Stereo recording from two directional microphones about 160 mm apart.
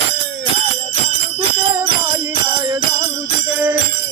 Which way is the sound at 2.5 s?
30° right (ahead or behind).